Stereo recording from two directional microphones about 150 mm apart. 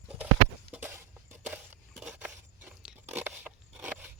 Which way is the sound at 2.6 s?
10° right (ahead or behind).